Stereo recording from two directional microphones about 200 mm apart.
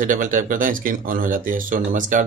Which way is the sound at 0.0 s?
40° right (ahead or behind).